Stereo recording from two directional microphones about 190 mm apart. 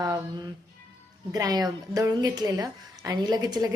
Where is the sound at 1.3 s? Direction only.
20° right (ahead or behind).